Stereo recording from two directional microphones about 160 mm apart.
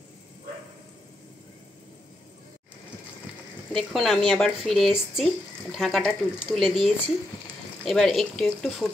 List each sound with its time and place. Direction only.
3.7 s speech: centre (ahead or behind)